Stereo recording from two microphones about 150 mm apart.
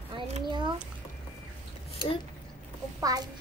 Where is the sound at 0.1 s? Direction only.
30° right (ahead or behind).